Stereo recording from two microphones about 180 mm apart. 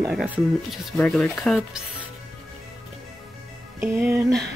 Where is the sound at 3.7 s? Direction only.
15° right (ahead or behind).